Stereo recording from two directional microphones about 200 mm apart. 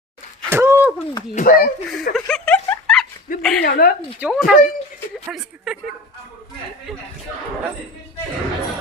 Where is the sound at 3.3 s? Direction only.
45° left (ahead or behind).